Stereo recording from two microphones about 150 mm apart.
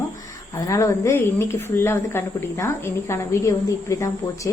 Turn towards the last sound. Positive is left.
turn(degrees=20)  # may be behind; listen again after turning